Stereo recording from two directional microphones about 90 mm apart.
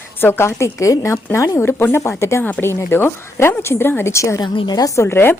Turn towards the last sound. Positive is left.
turn(degrees=25)  # may be behind; listen again after turning